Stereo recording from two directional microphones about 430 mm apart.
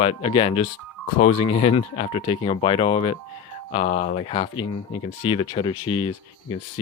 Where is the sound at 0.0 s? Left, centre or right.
Centre.